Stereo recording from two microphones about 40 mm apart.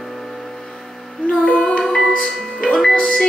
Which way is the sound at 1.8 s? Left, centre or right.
Centre.